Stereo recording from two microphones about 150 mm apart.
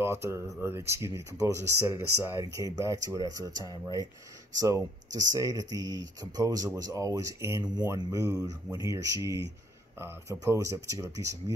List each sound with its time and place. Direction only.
0.0 s speech: 15° right (ahead or behind)